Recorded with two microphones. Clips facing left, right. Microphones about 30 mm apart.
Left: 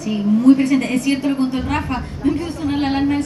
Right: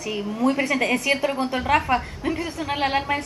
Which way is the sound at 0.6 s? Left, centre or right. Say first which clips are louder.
Left 4 dB; centre.